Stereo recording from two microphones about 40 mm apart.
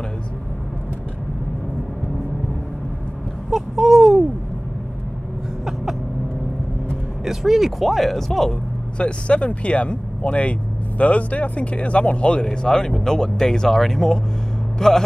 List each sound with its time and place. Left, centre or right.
3.4 s a sound: centre
7.2 s speech: centre
8.9 s a man's voice: left; by 15.0 s centre